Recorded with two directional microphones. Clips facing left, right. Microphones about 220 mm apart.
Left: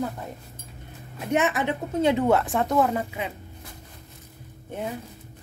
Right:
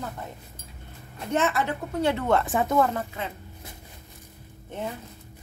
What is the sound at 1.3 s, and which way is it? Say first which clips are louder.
Speech: left 2 dB; 15° left (ahead or behind).